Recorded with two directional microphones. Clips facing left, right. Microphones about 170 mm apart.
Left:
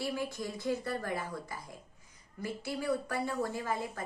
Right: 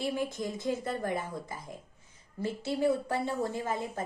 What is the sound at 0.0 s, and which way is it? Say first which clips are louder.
A woman's voice: right 3 dB; 20° right (ahead or behind).